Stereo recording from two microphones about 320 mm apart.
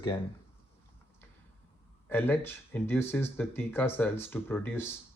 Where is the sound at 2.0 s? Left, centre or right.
Centre.